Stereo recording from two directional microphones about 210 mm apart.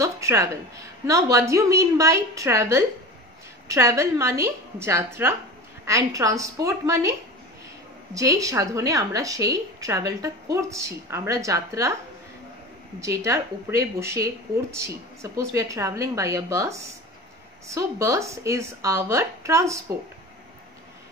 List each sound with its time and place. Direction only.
0.0 s a woman's voice: 15° right (ahead or behind)
13.0 s a woman's voice: 15° right (ahead or behind)
15.3 s a woman's voice: 15° right (ahead or behind)